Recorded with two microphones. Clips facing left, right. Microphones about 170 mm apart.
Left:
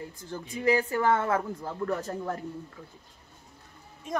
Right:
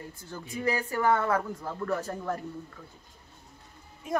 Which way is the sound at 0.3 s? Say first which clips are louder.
Left 4 dB; 20° left (ahead or behind).